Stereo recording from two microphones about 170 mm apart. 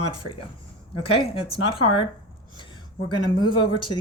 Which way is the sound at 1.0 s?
35° left (ahead or behind).